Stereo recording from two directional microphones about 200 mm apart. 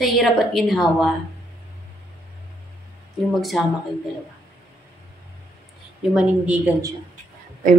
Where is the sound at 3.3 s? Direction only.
Centre (ahead or behind).